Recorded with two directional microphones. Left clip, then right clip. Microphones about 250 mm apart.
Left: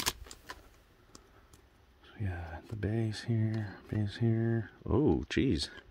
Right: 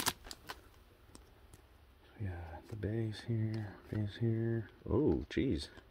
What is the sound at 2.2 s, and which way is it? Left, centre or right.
Speech, left.